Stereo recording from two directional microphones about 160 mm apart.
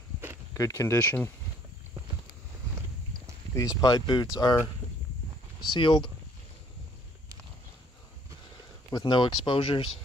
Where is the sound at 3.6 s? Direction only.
20° left (ahead or behind).